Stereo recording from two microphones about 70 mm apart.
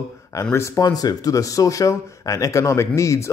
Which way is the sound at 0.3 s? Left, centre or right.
Left.